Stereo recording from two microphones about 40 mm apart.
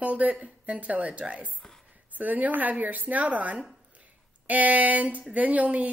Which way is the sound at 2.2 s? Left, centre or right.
Right.